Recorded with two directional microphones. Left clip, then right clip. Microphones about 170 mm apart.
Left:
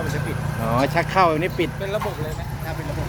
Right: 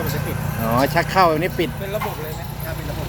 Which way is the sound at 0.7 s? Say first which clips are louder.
Right 2 dB; 5° right (ahead or behind).